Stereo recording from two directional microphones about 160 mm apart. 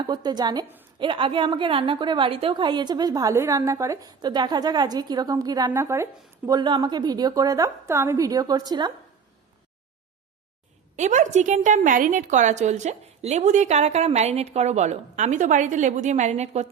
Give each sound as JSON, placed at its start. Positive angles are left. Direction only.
{"t": 0.0, "sound": "a woman's voice", "side_deg": -25}
{"t": 10.9, "sound": "a woman's voice", "side_deg": -50}